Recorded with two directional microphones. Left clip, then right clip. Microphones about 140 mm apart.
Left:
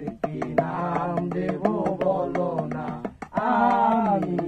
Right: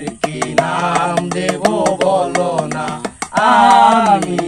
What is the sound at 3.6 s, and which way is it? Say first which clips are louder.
A capella: right 12 dB; 20° right (ahead or behind).